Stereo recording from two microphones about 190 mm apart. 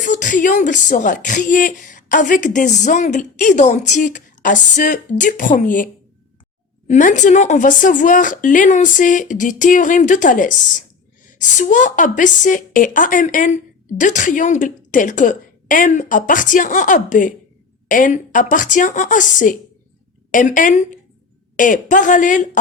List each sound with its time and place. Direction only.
0.0 s a woman's voice: 40° left (ahead or behind)